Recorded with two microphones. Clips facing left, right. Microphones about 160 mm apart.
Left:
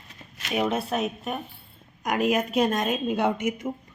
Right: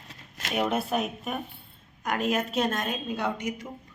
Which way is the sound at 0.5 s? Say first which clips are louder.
Left 1 dB; centre (ahead or behind).